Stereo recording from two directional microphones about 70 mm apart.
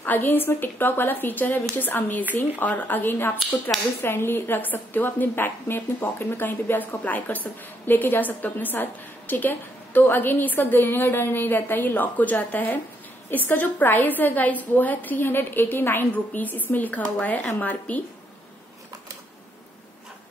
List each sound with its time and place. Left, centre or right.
0.0 s a woman's voice: left